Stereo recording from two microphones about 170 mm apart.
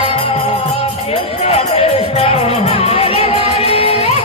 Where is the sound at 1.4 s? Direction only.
35° left (ahead or behind).